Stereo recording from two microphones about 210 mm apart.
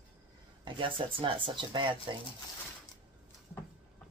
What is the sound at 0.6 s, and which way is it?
Speech, 25° right (ahead or behind).